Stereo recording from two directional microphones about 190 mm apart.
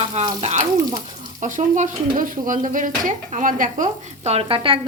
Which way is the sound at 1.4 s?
40° right (ahead or behind).